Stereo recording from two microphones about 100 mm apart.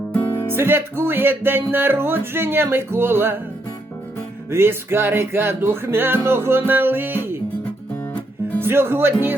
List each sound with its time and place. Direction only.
0.4 s music: 20° right (ahead or behind)
4.5 s music: 25° right (ahead or behind)
8.6 s music: 25° right (ahead or behind)